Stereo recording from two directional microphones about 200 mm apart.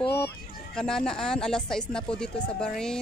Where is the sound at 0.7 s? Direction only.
5° left (ahead or behind).